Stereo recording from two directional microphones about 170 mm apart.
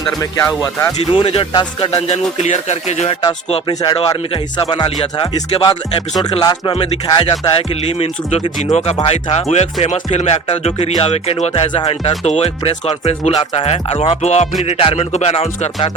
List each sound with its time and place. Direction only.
0.6 s speech: 20° left (ahead or behind)
1.1 s speech: 35° left (ahead or behind)
3.5 s speech: 25° left (ahead or behind)